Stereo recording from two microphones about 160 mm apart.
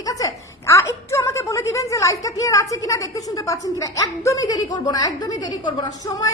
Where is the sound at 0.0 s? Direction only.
20° left (ahead or behind).